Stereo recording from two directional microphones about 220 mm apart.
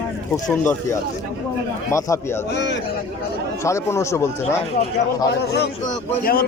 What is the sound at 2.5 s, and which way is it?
Speech, 55° left (ahead or behind).